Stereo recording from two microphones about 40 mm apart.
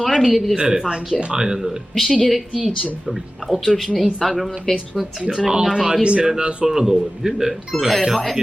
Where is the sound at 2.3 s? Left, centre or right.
Centre.